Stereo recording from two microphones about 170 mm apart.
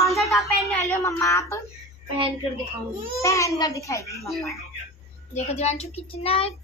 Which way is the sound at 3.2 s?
20° left (ahead or behind).